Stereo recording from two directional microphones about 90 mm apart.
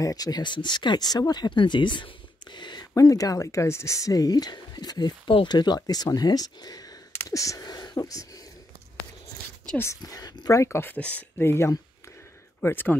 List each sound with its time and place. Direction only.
0.0 s speech: 45° left (ahead or behind); by 2.0 s 60° left (ahead or behind)
2.5 s a sound: 55° left (ahead or behind)
2.9 s speech: 40° left (ahead or behind)
10.0 s speech: 45° left (ahead or behind)
10.6 s speech: 25° left (ahead or behind)
11.0 s speech: 15° left (ahead or behind)
11.4 s speech: 30° left (ahead or behind)